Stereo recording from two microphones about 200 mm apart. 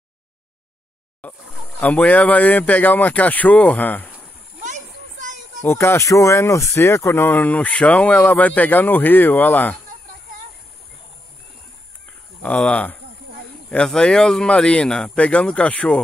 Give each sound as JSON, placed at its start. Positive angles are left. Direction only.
{"t": 1.8, "sound": "speech", "side_deg": 5}
{"t": 4.6, "sound": "children playing", "side_deg": -40}
{"t": 5.6, "sound": "speech", "side_deg": 10}
{"t": 12.4, "sound": "speech", "side_deg": 5}